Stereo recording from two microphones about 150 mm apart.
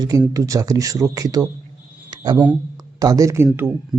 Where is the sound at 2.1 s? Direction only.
30° right (ahead or behind).